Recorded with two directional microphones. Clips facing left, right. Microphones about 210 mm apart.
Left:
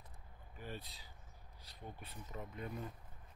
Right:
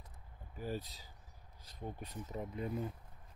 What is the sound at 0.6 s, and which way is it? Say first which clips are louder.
Speech: right 7 dB; 40° right (ahead or behind).